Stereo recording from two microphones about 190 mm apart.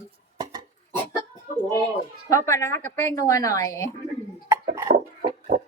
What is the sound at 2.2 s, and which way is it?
A woman's voice, 15° left (ahead or behind).